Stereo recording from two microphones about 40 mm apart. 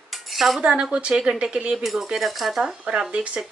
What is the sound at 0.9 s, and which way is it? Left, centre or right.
Speech, centre.